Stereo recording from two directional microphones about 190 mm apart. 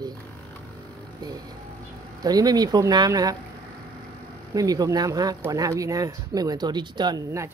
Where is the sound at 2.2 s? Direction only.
20° right (ahead or behind).